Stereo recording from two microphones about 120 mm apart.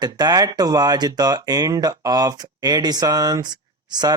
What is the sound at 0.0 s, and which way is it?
Speech, 35° right (ahead or behind).